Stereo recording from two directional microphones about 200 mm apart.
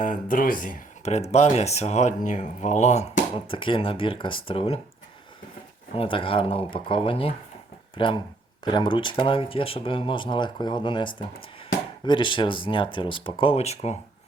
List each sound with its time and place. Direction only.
0.0 s speech: 40° left (ahead or behind)
5.9 s speech: 25° left (ahead or behind)